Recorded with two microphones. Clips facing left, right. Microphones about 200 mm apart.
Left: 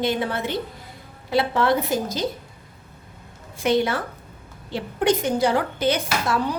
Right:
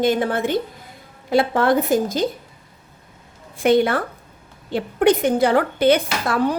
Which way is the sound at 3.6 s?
55° right (ahead or behind).